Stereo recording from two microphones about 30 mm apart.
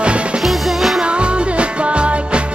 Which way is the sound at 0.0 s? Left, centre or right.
Right.